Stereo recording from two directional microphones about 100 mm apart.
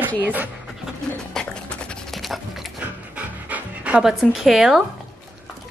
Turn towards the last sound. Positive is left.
turn(degrees=-5)  # may be behind; listen again after turning